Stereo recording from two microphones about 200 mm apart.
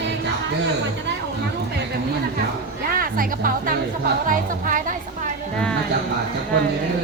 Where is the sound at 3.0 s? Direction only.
45° right (ahead or behind).